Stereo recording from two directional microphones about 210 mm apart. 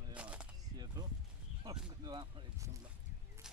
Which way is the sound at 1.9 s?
20° right (ahead or behind).